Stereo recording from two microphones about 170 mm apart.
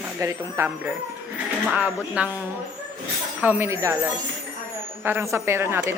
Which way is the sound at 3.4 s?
10° right (ahead or behind).